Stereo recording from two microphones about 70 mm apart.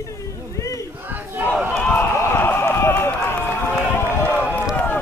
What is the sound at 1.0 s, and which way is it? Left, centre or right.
Battle cry, right.